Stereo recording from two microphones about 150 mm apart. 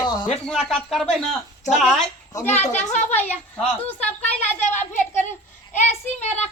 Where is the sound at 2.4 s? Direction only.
50° left (ahead or behind).